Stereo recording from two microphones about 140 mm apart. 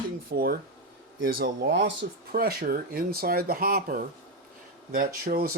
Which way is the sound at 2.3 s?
90° right.